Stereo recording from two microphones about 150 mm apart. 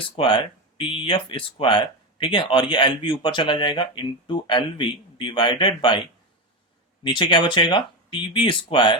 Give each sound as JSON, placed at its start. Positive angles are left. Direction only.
{"t": 0.2, "sound": "speech", "side_deg": 35}
{"t": 7.0, "sound": "speech", "side_deg": 30}